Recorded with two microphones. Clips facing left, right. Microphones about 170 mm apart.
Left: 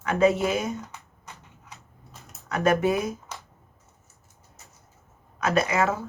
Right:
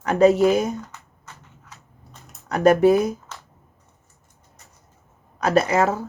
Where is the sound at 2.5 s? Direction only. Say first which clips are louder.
Right 7 dB; 40° right (ahead or behind).